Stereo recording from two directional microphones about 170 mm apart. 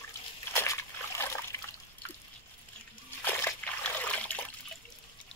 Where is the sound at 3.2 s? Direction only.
10° left (ahead or behind).